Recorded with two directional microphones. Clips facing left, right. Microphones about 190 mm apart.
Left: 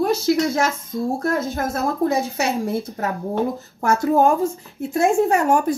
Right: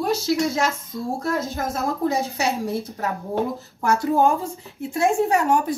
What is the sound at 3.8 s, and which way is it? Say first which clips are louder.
A woman's voice: left 2 dB; 50° left (ahead or behind).